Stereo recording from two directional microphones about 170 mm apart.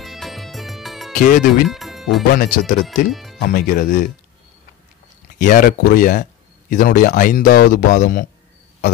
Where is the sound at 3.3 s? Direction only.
55° left (ahead or behind).